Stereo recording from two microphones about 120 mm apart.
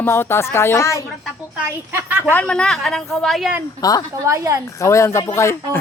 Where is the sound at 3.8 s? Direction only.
30° left (ahead or behind).